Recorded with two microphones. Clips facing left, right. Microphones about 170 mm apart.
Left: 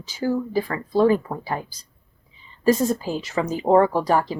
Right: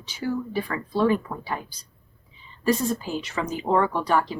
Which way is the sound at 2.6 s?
40° left (ahead or behind).